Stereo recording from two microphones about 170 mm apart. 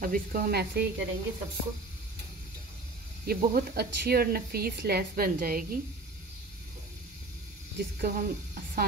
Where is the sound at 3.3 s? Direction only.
60° right (ahead or behind).